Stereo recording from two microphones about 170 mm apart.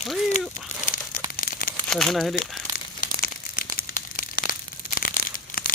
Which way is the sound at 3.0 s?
60° left (ahead or behind).